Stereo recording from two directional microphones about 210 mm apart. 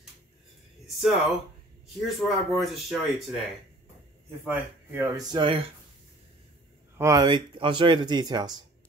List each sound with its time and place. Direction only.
0.8 s speech: centre (ahead or behind)
4.5 s speech: 10° right (ahead or behind)
7.0 s speech: 15° right (ahead or behind)